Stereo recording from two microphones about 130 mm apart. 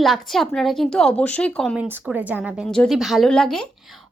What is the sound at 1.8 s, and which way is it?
Speech, 15° right (ahead or behind).